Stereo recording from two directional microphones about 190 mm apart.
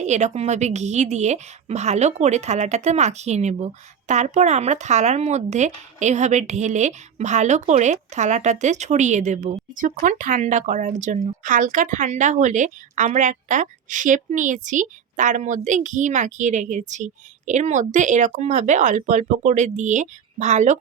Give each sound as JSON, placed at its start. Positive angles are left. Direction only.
{"t": 0.0, "sound": "speech", "side_deg": -35}